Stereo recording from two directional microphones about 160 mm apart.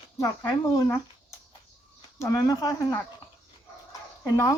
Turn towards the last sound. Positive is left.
turn(degrees=20)  # may be behind; listen again after turning